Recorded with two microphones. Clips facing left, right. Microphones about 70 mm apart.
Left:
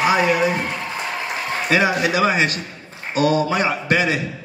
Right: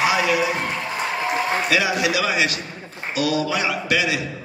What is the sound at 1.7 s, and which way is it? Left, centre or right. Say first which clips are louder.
A man's voice: left 6 dB; left.